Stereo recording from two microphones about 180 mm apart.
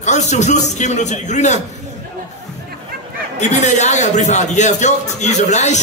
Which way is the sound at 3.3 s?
40° left (ahead or behind).